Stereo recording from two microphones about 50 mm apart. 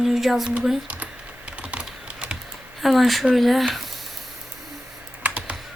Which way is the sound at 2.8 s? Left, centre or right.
Centre.